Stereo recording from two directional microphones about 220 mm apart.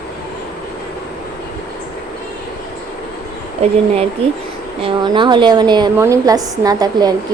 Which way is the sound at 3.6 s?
30° right (ahead or behind).